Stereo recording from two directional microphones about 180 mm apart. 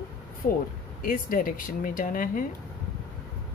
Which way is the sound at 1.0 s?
50° left (ahead or behind).